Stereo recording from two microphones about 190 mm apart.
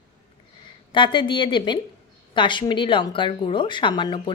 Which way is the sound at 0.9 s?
25° left (ahead or behind).